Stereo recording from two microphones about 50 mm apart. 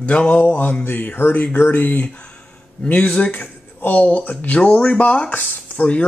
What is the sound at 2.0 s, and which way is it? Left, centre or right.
Speech, left.